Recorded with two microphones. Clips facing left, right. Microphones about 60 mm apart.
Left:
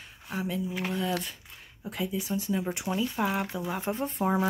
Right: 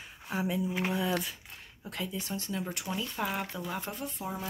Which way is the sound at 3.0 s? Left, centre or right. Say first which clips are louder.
Left 5 dB; centre.